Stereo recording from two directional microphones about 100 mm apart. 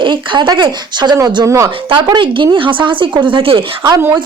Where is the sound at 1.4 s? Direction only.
30° right (ahead or behind).